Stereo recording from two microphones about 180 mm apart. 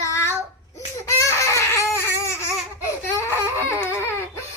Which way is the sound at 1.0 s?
15° left (ahead or behind).